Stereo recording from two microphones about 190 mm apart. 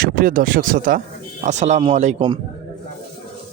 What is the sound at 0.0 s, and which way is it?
Speech, 45° right (ahead or behind).